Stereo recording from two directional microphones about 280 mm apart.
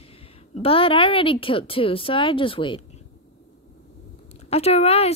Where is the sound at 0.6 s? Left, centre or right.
Centre.